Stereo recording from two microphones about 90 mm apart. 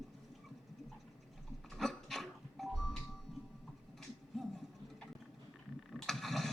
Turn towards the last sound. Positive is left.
turn(degrees=0)  # may be behind; listen again after turning